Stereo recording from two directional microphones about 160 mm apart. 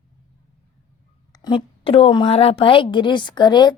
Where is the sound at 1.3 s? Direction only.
30° left (ahead or behind).